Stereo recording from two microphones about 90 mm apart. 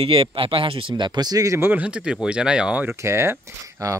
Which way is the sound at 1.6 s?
20° right (ahead or behind).